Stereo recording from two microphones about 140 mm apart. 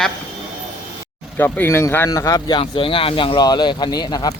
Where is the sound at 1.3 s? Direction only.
15° left (ahead or behind); by 4.3 s 35° left (ahead or behind).